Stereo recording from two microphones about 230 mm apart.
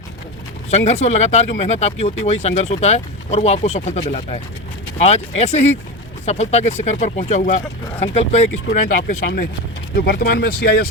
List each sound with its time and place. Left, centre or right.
0.9 s speech: left